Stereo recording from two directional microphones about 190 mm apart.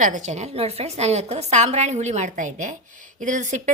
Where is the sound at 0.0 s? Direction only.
40° right (ahead or behind).